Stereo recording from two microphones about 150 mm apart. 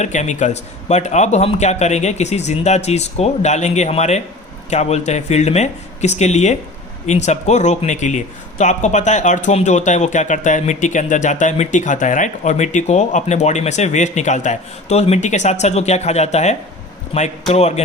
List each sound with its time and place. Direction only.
0.0 s a man's voice: 50° left (ahead or behind)